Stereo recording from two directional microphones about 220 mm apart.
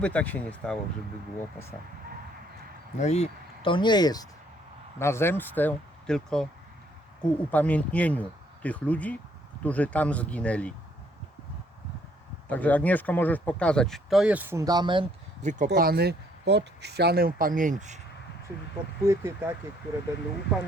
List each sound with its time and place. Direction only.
0.0 s speech: 5° left (ahead or behind)
3.0 s speech: 30° left (ahead or behind); by 10.8 s 5° left (ahead or behind)
12.5 s speech: 5° left (ahead or behind); by 18.0 s 35° right (ahead or behind)
19.0 s speech: 10° right (ahead or behind)